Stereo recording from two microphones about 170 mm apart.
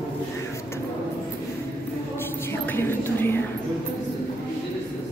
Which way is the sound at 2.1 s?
15° left (ahead or behind).